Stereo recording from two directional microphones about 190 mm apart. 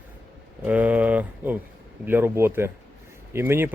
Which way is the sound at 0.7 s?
10° right (ahead or behind).